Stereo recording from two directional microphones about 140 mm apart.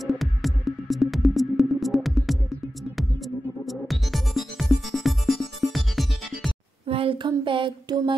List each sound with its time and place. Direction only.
0.0 s music: centre (ahead or behind)
6.9 s speech: 40° right (ahead or behind)